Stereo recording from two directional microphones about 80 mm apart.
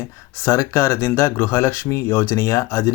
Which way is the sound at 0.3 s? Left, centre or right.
Left.